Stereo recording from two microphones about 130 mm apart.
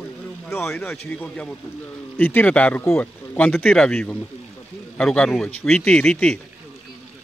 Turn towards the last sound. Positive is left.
turn(degrees=5)  # may be behind; listen again after turning